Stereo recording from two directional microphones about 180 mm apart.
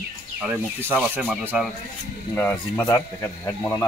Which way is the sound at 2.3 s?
10° left (ahead or behind).